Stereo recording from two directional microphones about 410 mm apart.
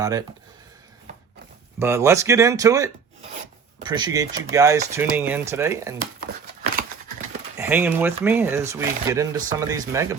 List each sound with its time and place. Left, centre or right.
0.0 s speech: centre
1.8 s speech: centre
6.3 s scissors: right
7.5 s speech: centre